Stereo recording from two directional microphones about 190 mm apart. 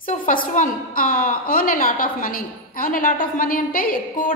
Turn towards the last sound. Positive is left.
turn(degrees=45)  # may be behind; listen again after turning